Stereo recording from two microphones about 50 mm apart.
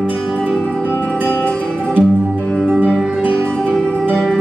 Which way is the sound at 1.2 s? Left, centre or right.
Left.